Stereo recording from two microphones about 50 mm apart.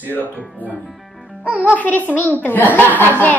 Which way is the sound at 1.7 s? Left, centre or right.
Left.